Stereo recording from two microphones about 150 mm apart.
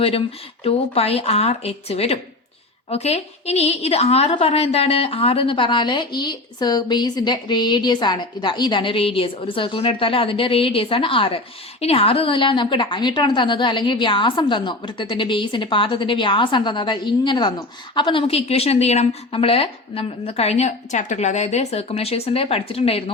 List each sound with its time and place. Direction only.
0.0 s a woman's voice: 40° left (ahead or behind)